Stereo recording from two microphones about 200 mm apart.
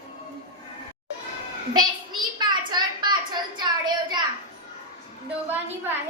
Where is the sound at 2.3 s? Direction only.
20° right (ahead or behind).